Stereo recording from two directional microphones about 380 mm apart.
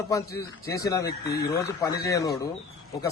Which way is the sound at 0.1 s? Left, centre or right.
Centre.